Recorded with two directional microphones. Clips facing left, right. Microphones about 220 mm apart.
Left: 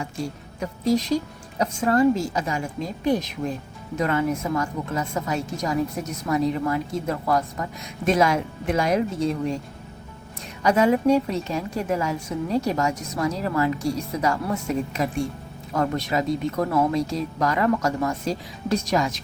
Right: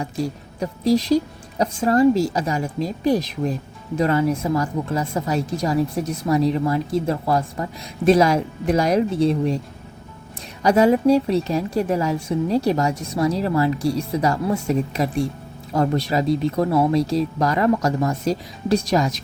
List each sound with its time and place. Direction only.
0.6 s a woman's voice: 35° right (ahead or behind)
10.6 s a woman's voice: 35° right (ahead or behind)